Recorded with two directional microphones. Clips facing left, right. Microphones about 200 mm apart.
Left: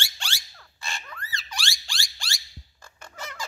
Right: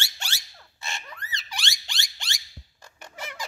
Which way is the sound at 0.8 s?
20° right (ahead or behind).